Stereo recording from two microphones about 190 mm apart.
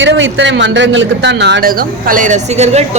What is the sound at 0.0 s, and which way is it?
A man's voice, 70° right (ahead or behind).